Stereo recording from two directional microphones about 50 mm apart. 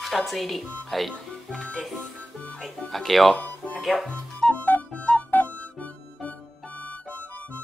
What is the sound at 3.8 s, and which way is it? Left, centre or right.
Speech, centre.